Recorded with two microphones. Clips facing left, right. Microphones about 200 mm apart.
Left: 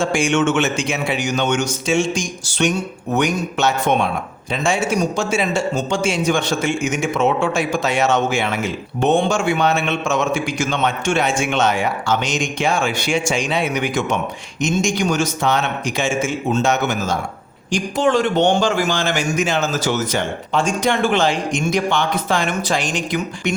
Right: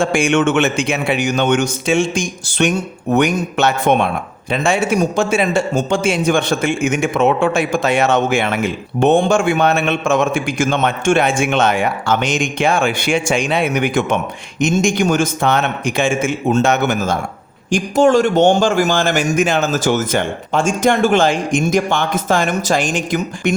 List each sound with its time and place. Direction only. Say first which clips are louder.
0.0 s a man's voice: right 3 dB; 60° right (ahead or behind)